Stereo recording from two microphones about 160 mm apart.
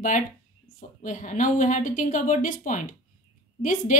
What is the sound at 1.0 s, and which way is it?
A woman's voice, 50° left (ahead or behind).